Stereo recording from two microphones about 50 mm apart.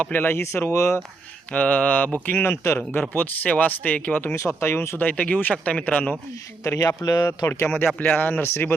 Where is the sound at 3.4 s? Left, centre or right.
Left.